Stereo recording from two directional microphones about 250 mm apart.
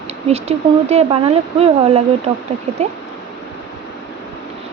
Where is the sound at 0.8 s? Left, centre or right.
Right.